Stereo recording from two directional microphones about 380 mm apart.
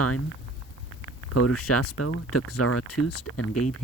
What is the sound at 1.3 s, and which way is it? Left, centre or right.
Speech, left.